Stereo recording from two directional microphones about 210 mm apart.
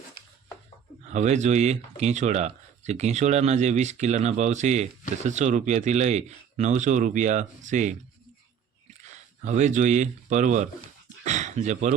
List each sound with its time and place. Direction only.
1.1 s speech: 35° right (ahead or behind)
9.0 s speech: 35° right (ahead or behind)